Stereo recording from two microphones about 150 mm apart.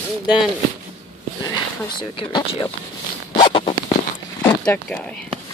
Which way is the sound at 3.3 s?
35° left (ahead or behind).